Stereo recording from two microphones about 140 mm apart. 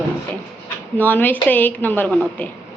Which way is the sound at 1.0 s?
15° left (ahead or behind).